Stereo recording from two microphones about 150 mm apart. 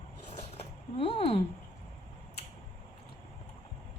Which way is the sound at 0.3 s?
45° left (ahead or behind).